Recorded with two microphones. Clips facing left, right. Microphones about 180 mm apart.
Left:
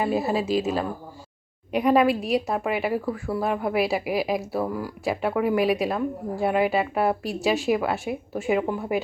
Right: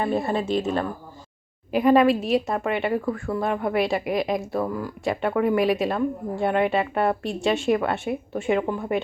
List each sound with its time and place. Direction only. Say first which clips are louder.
0.0 s speech: even; 5° left (ahead or behind)